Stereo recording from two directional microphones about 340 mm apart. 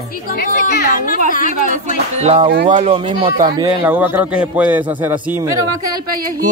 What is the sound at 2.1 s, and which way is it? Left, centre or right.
Speech, centre.